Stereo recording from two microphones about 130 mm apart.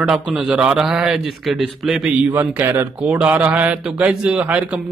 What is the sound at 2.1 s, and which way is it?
Speech, 10° right (ahead or behind).